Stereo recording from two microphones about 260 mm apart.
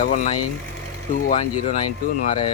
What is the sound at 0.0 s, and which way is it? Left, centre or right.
Speech, left.